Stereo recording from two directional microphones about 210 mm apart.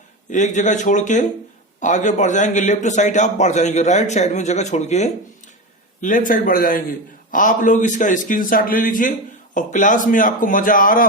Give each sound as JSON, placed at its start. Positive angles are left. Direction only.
{"t": 0.3, "sound": "a man's voice", "side_deg": 35}